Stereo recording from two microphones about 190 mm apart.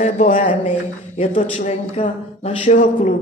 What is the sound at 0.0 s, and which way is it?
Speech, 35° left (ahead or behind).